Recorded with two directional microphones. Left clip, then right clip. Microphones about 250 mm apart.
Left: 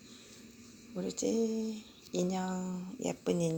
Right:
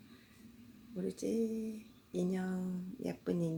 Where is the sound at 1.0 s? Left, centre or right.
Centre.